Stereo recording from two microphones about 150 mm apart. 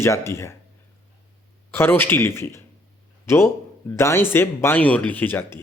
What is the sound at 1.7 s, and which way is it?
A man's voice, 15° left (ahead or behind).